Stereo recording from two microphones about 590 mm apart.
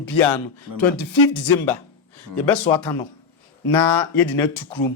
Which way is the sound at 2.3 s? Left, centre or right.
Left.